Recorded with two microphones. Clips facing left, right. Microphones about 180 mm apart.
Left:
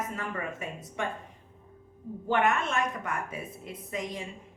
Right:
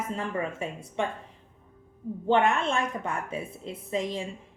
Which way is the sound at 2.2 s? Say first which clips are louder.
Right 3 dB; 30° right (ahead or behind).